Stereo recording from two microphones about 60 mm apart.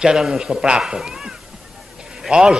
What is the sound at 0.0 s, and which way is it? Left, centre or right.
Speech, centre.